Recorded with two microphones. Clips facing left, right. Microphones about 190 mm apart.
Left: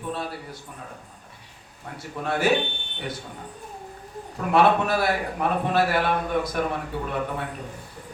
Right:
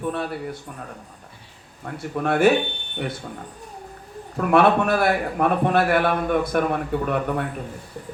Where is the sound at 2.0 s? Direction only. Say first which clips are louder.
Right 6 dB; 55° right (ahead or behind).